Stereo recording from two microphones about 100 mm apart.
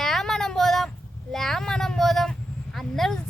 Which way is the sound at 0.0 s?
5° left (ahead or behind).